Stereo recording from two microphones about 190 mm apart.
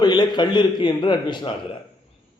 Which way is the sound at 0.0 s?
20° left (ahead or behind).